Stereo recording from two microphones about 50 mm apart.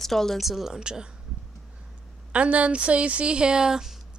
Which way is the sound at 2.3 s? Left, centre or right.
Right.